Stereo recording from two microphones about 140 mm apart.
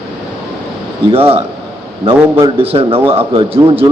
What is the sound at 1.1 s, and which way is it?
A man's voice, 45° right (ahead or behind).